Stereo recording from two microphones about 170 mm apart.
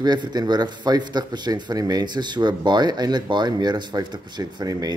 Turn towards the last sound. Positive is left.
turn(degrees=-25)  # may be behind; listen again after turning